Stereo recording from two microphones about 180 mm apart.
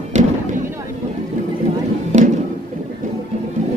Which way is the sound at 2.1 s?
50° right (ahead or behind).